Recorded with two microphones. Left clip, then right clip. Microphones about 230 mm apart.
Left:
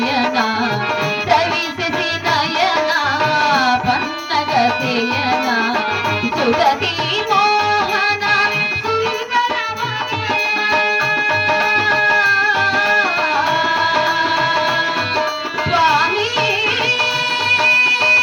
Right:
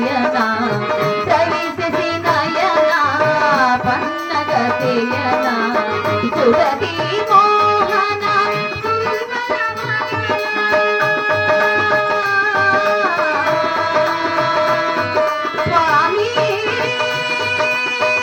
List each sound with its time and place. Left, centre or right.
2.3 s music: left
6.4 s music: left
11.3 s music: left
15.7 s music: left
17.5 s music: left